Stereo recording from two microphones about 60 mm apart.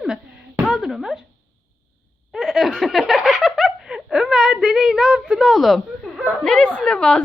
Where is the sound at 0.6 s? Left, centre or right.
Centre.